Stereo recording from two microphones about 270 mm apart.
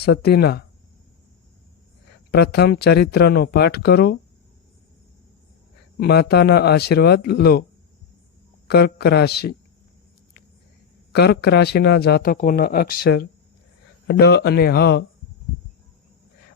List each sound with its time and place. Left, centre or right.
0.0 s speech: left
2.3 s speech: left
6.0 s speech: left
8.6 s speech: left
11.1 s speech: left
14.1 s speech: left